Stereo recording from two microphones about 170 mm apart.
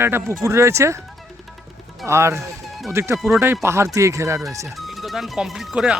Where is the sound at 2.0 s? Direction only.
15° right (ahead or behind).